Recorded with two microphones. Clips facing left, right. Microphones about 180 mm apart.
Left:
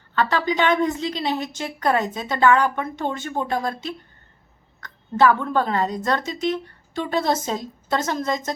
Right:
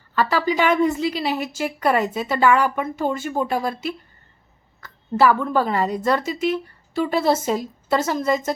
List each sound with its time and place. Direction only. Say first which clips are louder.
0.2 s a woman's voice: right 1 dB; 5° right (ahead or behind)